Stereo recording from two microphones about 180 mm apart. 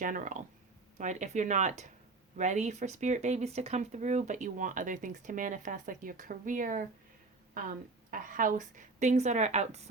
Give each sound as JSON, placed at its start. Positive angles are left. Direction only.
{"t": 0.0, "sound": "a woman's voice", "side_deg": -45}
{"t": 8.1, "sound": "a woman's voice", "side_deg": -45}